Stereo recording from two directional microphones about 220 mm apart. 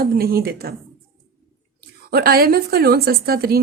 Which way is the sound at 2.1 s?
45° right (ahead or behind).